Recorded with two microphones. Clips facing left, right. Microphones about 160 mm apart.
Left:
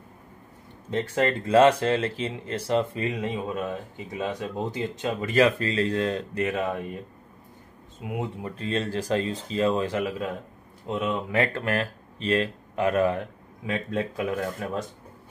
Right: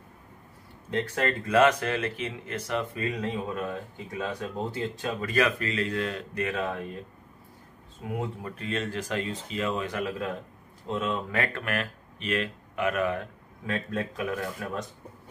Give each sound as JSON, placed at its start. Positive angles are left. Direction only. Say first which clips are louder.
{"t": 0.8, "sound": "speech", "louder": "left 3 dB", "side_deg": 25}
{"t": 6.5, "sound": "speech", "louder": "left 3 dB", "side_deg": 15}
{"t": 8.0, "sound": "speech", "louder": "left 2 dB", "side_deg": 15}
{"t": 10.0, "sound": "speech", "louder": "left 2 dB", "side_deg": 15}